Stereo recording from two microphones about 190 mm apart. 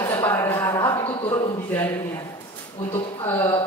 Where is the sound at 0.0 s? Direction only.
10° left (ahead or behind).